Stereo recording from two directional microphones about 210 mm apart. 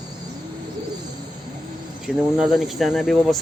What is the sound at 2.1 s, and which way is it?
Speech, 5° right (ahead or behind).